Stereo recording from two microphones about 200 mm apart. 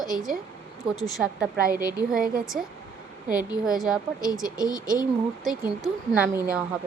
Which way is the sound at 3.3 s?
20° left (ahead or behind).